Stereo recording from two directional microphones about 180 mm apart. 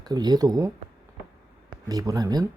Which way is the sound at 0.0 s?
25° right (ahead or behind).